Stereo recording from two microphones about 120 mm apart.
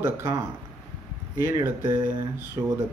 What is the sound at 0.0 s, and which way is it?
Speech, 20° right (ahead or behind).